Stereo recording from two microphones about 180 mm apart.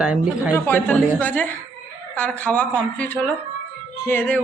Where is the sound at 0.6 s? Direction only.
10° left (ahead or behind).